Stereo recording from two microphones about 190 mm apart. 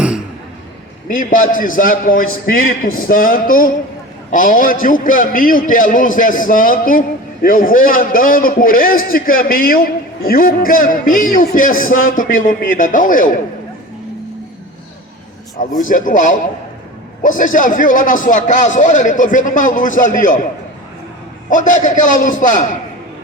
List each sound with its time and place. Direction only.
1.0 s a man's voice: 45° left (ahead or behind)
15.8 s a man's voice: 45° left (ahead or behind)
21.5 s a man's voice: 40° left (ahead or behind)